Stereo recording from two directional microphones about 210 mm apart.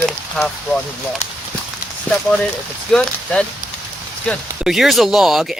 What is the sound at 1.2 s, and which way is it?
Speech, 35° left (ahead or behind).